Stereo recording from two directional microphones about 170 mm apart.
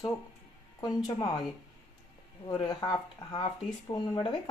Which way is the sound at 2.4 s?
25° left (ahead or behind).